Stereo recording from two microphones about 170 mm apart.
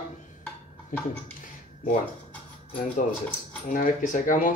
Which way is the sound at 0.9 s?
50° left (ahead or behind).